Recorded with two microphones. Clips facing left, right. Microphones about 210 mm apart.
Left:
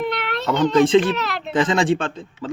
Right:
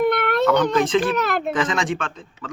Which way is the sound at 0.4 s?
25° left (ahead or behind).